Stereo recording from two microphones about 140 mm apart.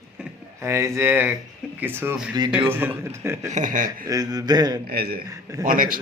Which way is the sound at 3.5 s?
65° right (ahead or behind).